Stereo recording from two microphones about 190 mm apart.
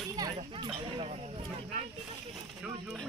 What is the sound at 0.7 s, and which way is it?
Speech, 35° right (ahead or behind).